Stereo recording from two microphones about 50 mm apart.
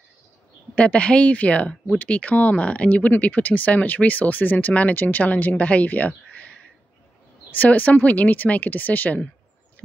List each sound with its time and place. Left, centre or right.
0.7 s speech: left
7.5 s speech: left